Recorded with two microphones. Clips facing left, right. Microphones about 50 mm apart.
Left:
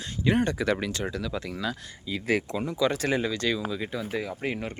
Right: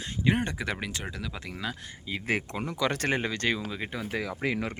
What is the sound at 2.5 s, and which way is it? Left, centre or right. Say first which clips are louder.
Speech: left 3 dB; right.